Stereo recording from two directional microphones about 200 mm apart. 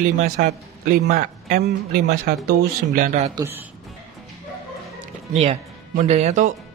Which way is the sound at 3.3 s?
10° right (ahead or behind).